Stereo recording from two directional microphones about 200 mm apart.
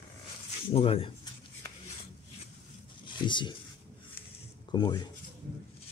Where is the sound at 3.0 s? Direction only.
25° left (ahead or behind).